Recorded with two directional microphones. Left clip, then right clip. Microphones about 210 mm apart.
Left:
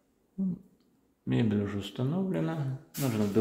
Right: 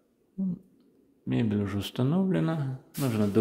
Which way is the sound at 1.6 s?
30° right (ahead or behind).